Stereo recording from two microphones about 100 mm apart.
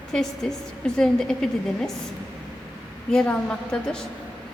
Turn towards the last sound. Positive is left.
turn(degrees=5)  # may be behind; listen again after turning